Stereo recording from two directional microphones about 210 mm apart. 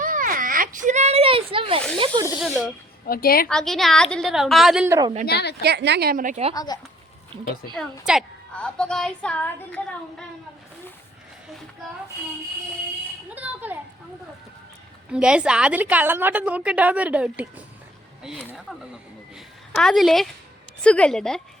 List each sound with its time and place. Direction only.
0.0 s a sound: 40° right (ahead or behind)
2.4 s a woman's voice: centre (ahead or behind)
3.1 s a woman's voice: 45° left (ahead or behind)
3.5 s a woman's voice: centre (ahead or behind)
4.9 s a woman's voice: 20° right (ahead or behind)
5.3 s a woman's voice: 50° left (ahead or behind)
5.6 s a woman's voice: 55° right (ahead or behind); by 6.5 s 35° right (ahead or behind)
6.5 s speech: 15° left (ahead or behind)
7.3 s speech: 25° right (ahead or behind)
7.8 s a woman's voice: centre (ahead or behind)
13.3 s a woman's voice: 10° right (ahead or behind)
15.1 s a woman's voice: 5° right (ahead or behind)